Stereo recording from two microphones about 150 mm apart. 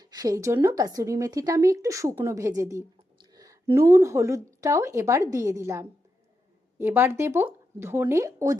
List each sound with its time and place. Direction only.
0.0 s a woman's voice: 25° right (ahead or behind)
2.6 s a sound: 20° right (ahead or behind)
3.8 s a woman's voice: 20° right (ahead or behind)